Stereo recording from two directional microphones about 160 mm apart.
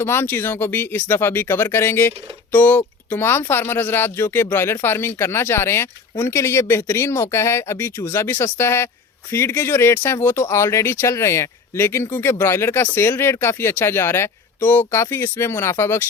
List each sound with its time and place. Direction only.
0.0 s speech: 15° left (ahead or behind)